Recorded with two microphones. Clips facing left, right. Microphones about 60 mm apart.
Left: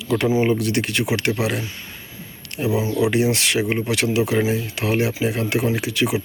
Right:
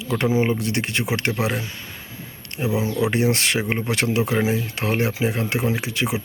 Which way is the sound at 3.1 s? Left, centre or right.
Right.